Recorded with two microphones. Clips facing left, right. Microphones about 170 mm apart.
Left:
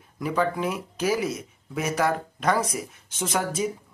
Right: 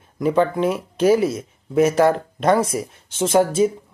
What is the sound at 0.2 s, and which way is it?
Speech, 25° right (ahead or behind).